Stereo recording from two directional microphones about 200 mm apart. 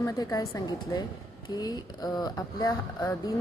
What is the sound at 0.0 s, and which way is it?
Speech, 20° left (ahead or behind).